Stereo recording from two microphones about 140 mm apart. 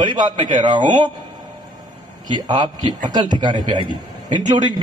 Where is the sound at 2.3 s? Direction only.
30° right (ahead or behind).